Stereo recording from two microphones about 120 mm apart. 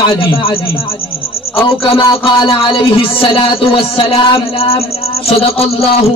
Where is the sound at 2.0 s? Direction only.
35° left (ahead or behind).